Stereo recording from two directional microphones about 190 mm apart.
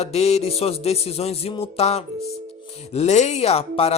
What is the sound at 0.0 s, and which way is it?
A man's voice, 35° left (ahead or behind).